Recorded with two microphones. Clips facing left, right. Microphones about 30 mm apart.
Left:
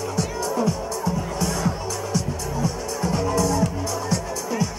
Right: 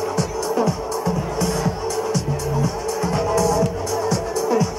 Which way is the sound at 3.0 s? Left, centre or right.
Centre.